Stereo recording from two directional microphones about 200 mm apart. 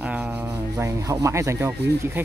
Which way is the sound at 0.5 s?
15° right (ahead or behind).